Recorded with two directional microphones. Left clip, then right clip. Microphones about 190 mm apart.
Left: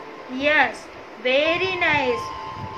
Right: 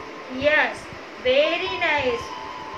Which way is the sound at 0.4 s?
55° left (ahead or behind).